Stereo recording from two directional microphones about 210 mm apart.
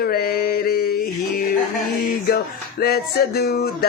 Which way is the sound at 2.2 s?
45° left (ahead or behind).